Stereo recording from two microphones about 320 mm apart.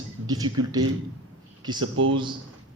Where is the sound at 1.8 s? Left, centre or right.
Right.